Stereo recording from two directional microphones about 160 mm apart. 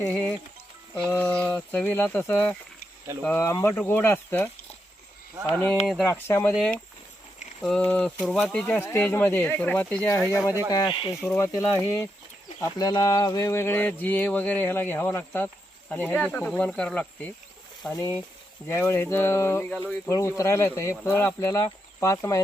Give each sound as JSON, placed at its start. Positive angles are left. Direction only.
{"t": 0.0, "sound": "speech", "side_deg": 10}
{"t": 5.8, "sound": "speech", "side_deg": 0}
{"t": 6.1, "sound": "speech", "side_deg": 15}
{"t": 6.5, "sound": "speech", "side_deg": 5}
{"t": 11.2, "sound": "speech", "side_deg": 15}